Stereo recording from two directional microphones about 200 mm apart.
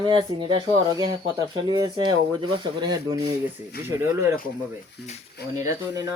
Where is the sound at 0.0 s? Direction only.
25° right (ahead or behind).